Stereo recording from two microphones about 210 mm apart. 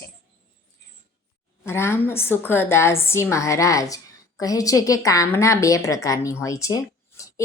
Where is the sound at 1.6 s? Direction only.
10° left (ahead or behind).